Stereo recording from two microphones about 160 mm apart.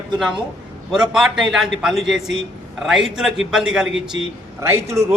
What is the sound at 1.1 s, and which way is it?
A man's voice, centre (ahead or behind).